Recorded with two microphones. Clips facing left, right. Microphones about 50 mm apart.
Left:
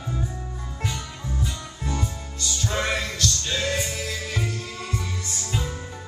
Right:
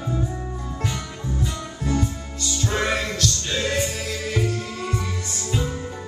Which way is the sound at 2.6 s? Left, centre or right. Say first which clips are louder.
Right 3 dB; right.